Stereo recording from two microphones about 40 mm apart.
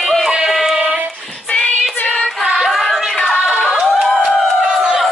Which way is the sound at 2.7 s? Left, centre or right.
Centre.